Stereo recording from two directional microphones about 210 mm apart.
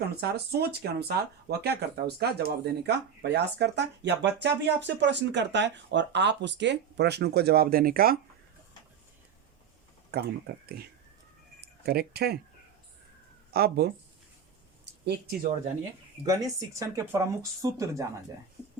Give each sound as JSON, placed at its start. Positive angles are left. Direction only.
{"t": 0.2, "sound": "speech", "side_deg": -50}
{"t": 10.1, "sound": "speech", "side_deg": -50}
{"t": 13.5, "sound": "speech", "side_deg": -50}
{"t": 14.9, "sound": "a sound", "side_deg": -55}
{"t": 16.2, "sound": "speech", "side_deg": -15}